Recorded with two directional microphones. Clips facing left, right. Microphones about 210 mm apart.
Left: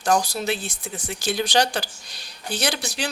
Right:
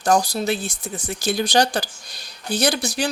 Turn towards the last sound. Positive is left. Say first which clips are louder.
# right 5 dB
turn(degrees=-40)  # may be behind; listen again after turning